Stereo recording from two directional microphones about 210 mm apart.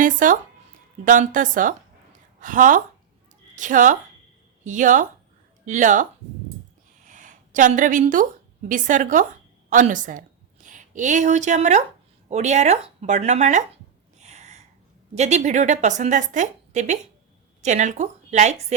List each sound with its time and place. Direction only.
0.0 s a woman's voice: 40° right (ahead or behind)
7.1 s a woman's voice: 40° right (ahead or behind)
14.2 s a sound: 35° right (ahead or behind)
15.1 s a woman's voice: 30° right (ahead or behind)